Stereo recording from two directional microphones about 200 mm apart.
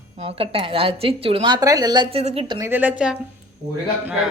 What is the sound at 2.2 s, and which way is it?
Speech, 30° right (ahead or behind).